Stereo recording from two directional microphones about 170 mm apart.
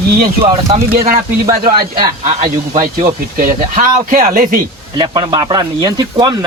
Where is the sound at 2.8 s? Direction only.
50° right (ahead or behind).